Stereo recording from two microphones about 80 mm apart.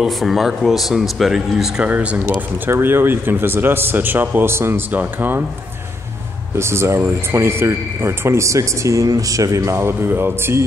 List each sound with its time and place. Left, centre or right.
0.0 s speech: centre
1.9 s speech: centre
2.7 s a man's voice: right
6.5 s a man's voice: right